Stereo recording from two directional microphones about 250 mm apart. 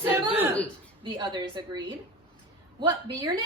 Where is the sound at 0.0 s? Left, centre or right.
Centre.